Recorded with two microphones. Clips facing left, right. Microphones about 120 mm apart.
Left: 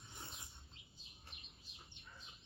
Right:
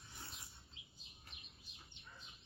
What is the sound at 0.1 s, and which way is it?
Chirp, 25° left (ahead or behind).